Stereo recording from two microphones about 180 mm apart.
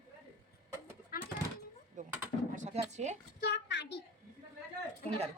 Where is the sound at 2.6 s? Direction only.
40° right (ahead or behind).